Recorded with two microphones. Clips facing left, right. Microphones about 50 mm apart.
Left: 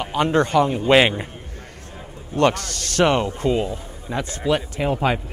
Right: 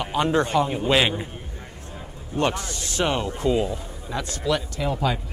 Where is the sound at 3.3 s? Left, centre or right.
Left.